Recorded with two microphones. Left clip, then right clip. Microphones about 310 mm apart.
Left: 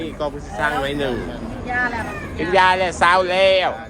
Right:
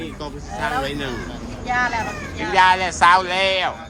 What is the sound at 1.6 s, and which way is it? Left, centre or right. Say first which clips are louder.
Speech: right 1 dB; right.